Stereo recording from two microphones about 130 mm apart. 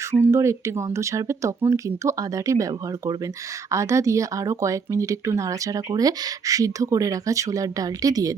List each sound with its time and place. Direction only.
0.1 s speech: 20° right (ahead or behind)